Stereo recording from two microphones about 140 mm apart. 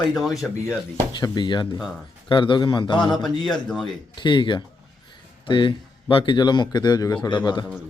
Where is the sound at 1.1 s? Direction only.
30° left (ahead or behind).